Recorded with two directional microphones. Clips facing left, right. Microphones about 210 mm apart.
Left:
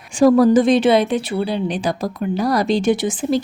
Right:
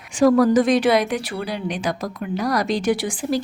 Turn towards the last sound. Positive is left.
turn(degrees=20)  # may be behind; listen again after turning